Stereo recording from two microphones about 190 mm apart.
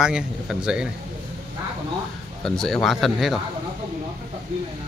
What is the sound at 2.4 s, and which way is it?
Speech, centre (ahead or behind).